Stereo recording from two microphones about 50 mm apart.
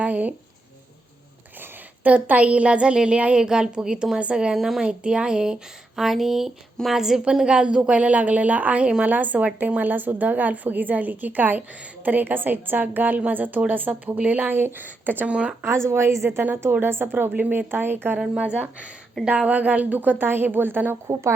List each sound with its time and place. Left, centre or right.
0.0 s speech: right
2.0 s a woman's voice: right; by 4.9 s centre
4.9 s a woman's voice: right
15.3 s a woman's voice: right
15.6 s a woman's voice: right
18.2 s a woman's voice: centre; by 21.0 s right
21.1 s a woman's voice: right